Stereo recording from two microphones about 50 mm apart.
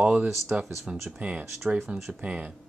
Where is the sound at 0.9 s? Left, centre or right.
Centre.